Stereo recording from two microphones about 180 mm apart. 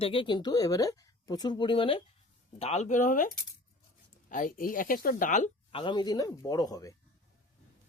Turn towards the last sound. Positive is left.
turn(degrees=20)  # may be behind; listen again after turning